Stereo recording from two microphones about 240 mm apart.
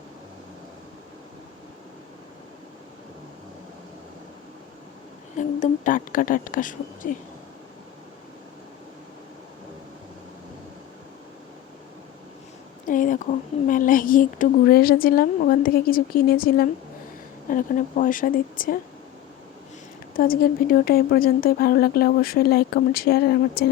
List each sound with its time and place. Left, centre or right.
5.4 s a woman's voice: left
12.9 s a sound: left
13.7 s a woman's voice: left
20.1 s a woman's voice: left